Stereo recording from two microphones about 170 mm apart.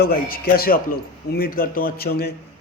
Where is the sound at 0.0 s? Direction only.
65° left (ahead or behind).